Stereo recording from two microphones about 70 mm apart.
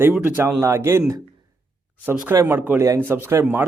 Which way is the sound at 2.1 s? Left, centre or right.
Right.